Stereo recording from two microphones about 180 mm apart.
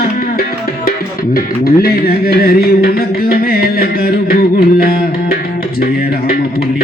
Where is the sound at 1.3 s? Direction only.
55° left (ahead or behind).